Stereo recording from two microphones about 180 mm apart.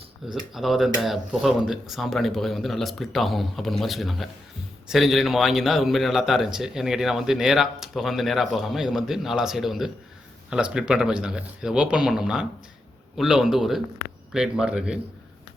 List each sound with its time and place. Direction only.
0.5 s a man's voice: centre (ahead or behind)